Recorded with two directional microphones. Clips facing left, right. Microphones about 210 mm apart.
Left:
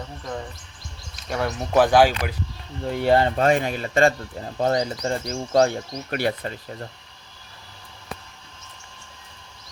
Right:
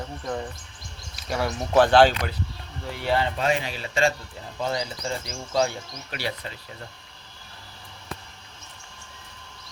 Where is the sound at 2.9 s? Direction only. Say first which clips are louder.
Left 6 dB; 45° left (ahead or behind).